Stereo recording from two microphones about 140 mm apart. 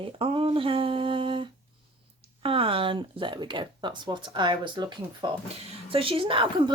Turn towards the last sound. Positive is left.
turn(degrees=-40)  # may be behind; listen again after turning